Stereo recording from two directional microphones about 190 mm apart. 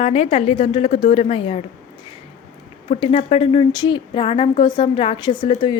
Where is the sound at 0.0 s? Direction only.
30° left (ahead or behind).